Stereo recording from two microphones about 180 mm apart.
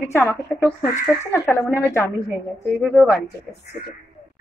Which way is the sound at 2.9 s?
Centre (ahead or behind).